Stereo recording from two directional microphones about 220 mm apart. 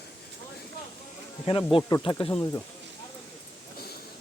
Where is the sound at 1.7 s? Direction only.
20° left (ahead or behind).